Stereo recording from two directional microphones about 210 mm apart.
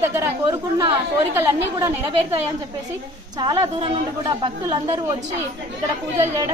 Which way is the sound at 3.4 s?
25° right (ahead or behind).